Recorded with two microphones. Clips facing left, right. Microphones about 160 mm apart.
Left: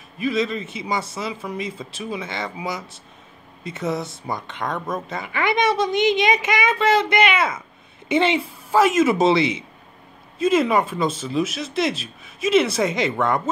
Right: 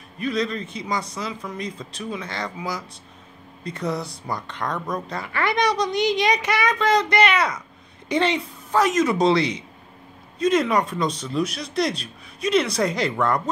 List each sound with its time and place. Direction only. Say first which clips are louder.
0.2 s speech: left 2 dB; 5° left (ahead or behind)
3.6 s speech: left 1 dB; centre (ahead or behind)